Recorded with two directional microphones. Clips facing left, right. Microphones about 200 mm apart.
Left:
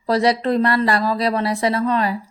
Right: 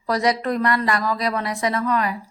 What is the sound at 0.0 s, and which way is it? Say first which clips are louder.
Speech: left 3 dB; 30° left (ahead or behind).